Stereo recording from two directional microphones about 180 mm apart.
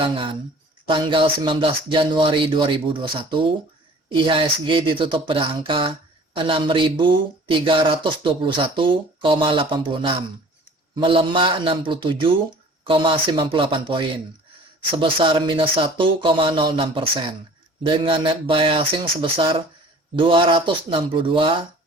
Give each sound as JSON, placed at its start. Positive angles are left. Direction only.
{"t": 0.0, "sound": "speech", "side_deg": -30}